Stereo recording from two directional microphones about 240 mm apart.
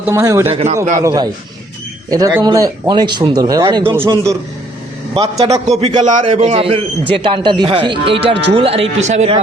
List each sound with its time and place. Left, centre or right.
0.0 s speech: centre
0.5 s a man's voice: right
0.8 s speech: centre
5.6 s a man's voice: right